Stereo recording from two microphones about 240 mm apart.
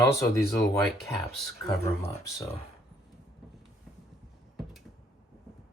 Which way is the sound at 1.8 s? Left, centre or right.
Centre.